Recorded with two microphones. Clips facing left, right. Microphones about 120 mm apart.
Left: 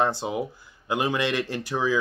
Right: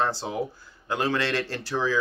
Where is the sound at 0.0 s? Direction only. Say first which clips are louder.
Left 2 dB; 15° left (ahead or behind).